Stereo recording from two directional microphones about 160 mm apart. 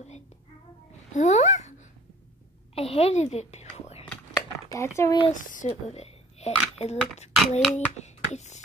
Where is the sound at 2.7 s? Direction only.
40° left (ahead or behind).